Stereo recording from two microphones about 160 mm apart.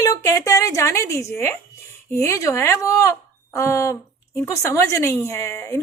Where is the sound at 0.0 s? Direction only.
20° left (ahead or behind).